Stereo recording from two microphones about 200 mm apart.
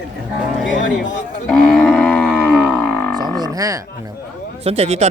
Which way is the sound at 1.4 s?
5° left (ahead or behind).